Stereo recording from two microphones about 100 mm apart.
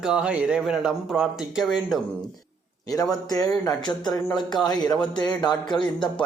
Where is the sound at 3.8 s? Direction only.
45° left (ahead or behind).